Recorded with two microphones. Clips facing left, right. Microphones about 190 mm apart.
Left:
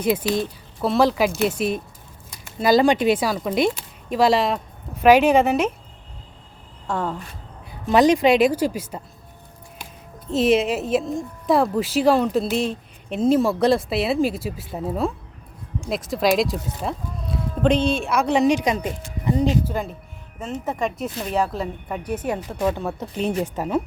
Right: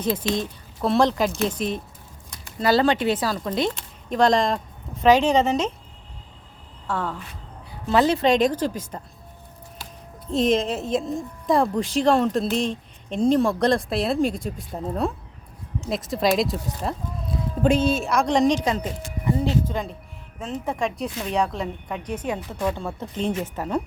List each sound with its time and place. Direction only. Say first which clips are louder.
0.0 s speech: left 3 dB; 10° left (ahead or behind)
6.8 s speech: left 2 dB; 15° left (ahead or behind)
10.2 s a woman's voice: left 3 dB; 5° left (ahead or behind)